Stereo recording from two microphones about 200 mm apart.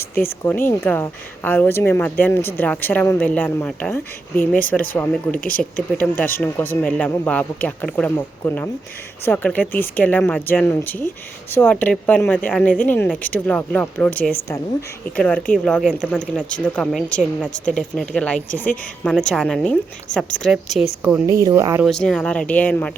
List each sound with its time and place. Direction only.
0.1 s speech: 45° left (ahead or behind)
0.4 s speech: 10° left (ahead or behind)
5.4 s speech: 45° left (ahead or behind)
5.7 s speech: 10° left (ahead or behind)
15.5 s speech: centre (ahead or behind)
20.1 s speech: 40° left (ahead or behind)
20.4 s speech: centre (ahead or behind)
21.0 s speech: 10° right (ahead or behind)
21.8 s speech: 5° left (ahead or behind)